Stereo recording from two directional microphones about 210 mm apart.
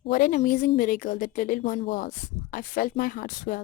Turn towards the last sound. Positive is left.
turn(degrees=40)  # may be behind; listen again after turning